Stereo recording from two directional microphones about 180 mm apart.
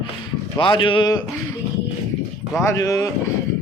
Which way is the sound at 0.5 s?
25° left (ahead or behind).